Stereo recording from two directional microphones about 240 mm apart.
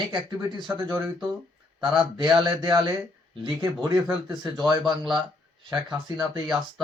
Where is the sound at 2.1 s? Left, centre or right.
Centre.